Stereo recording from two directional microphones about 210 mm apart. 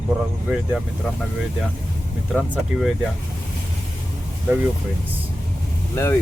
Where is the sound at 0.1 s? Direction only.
5° right (ahead or behind).